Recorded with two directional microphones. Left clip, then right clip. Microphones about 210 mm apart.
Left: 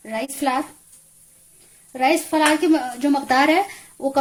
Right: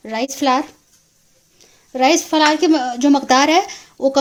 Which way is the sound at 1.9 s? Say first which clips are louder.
Right 4 dB; 40° right (ahead or behind).